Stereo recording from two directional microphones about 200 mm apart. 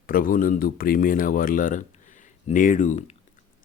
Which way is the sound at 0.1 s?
45° left (ahead or behind).